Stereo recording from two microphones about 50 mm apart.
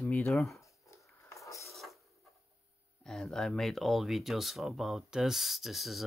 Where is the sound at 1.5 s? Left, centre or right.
Left.